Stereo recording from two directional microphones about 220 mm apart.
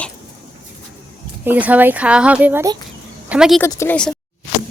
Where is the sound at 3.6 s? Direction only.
10° left (ahead or behind).